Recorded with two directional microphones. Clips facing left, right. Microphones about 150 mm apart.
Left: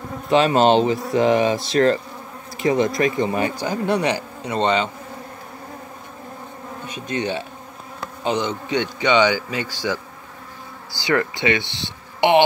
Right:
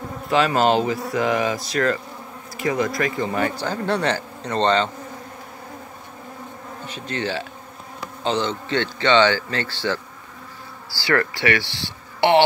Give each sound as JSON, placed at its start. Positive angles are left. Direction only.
{"t": 0.3, "sound": "speech", "side_deg": 25}
{"t": 6.9, "sound": "speech", "side_deg": 15}